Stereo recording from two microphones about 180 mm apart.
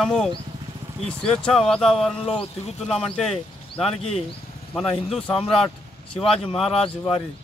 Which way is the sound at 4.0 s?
35° left (ahead or behind).